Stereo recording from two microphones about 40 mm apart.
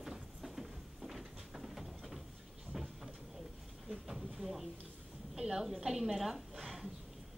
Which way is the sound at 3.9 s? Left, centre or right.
Centre.